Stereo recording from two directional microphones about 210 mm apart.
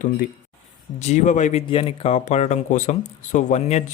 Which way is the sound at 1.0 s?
35° left (ahead or behind).